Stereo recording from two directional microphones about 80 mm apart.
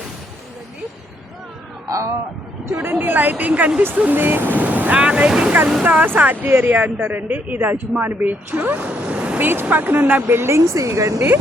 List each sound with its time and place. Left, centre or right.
2.9 s a woman's voice: right